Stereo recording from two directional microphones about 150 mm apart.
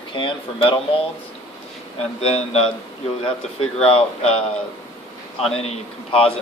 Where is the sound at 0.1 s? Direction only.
35° left (ahead or behind).